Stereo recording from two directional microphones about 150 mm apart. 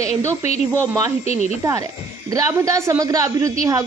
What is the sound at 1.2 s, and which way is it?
Speech, 45° left (ahead or behind).